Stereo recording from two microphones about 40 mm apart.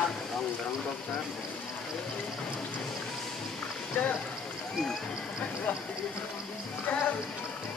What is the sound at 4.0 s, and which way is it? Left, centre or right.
Speech, left.